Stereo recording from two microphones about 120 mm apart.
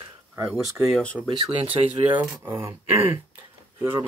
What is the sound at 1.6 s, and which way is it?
Speech, 50° right (ahead or behind).